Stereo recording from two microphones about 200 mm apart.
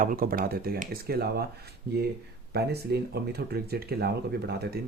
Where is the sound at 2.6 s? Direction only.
55° right (ahead or behind).